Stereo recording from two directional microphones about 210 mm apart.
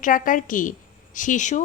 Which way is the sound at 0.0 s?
40° left (ahead or behind).